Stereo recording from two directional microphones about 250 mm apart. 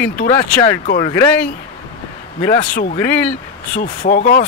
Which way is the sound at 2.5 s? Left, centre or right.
Left.